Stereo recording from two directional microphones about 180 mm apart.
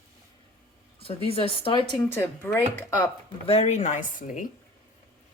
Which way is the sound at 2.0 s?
10° left (ahead or behind).